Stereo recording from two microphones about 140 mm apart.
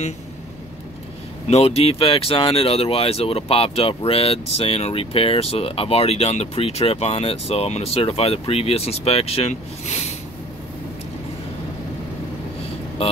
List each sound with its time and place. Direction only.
1.5 s speech: 45° left (ahead or behind)